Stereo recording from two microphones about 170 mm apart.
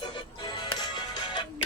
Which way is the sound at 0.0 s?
25° left (ahead or behind).